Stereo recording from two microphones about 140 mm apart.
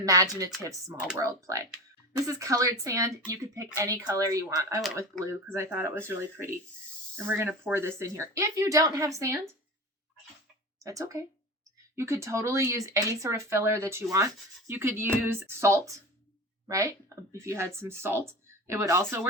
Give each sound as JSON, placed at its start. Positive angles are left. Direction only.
{"t": 0.0, "sound": "speech", "side_deg": -25}
{"t": 10.8, "sound": "speech", "side_deg": -25}